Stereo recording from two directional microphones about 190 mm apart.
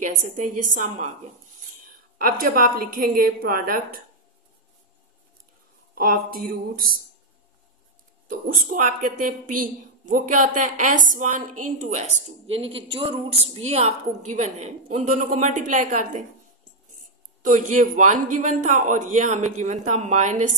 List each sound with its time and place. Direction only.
0.0 s a woman's voice: 45° right (ahead or behind)
5.9 s a woman's voice: 50° right (ahead or behind)
8.6 s a woman's voice: 45° right (ahead or behind)